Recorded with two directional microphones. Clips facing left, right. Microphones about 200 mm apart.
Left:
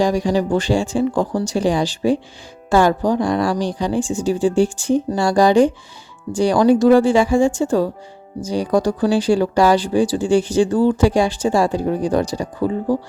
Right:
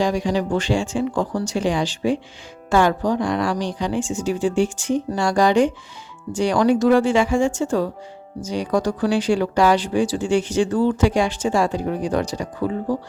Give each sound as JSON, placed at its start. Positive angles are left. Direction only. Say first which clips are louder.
{"t": 0.0, "sound": "speech", "louder": "left 3 dB", "side_deg": 40}